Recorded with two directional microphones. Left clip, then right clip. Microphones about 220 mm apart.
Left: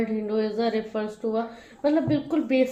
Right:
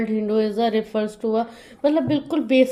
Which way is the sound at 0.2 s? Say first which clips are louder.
Right 8 dB; 45° right (ahead or behind).